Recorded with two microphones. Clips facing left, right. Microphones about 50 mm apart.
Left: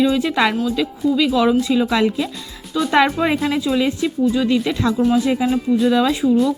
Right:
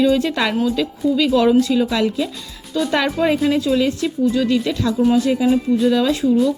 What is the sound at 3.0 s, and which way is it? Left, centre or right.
A woman's voice, centre.